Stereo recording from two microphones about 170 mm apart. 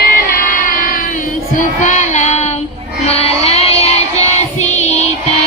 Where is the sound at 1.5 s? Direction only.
45° left (ahead or behind).